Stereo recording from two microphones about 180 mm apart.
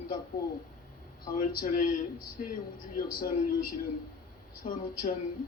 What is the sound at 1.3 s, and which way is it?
Speech, 55° left (ahead or behind).